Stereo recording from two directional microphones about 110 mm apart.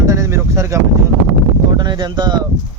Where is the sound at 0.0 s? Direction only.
30° right (ahead or behind).